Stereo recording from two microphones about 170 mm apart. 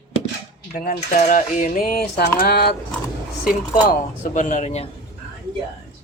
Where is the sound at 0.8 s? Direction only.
50° left (ahead or behind).